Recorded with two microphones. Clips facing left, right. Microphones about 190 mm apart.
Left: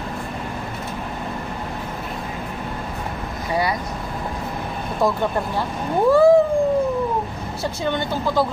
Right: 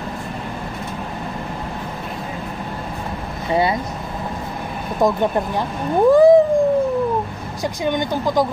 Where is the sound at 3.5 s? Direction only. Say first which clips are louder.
Right 4 dB; 25° right (ahead or behind).